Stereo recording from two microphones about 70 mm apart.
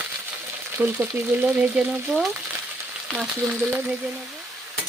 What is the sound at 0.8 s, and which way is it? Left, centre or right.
Frying, right.